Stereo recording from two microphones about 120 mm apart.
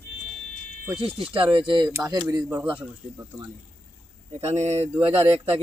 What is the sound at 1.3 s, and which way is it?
Speech, 45° right (ahead or behind).